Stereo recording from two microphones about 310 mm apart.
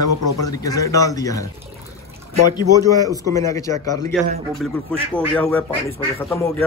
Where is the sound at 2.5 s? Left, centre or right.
Centre.